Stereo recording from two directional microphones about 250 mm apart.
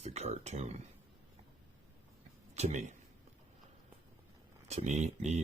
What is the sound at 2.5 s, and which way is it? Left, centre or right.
Speech, right.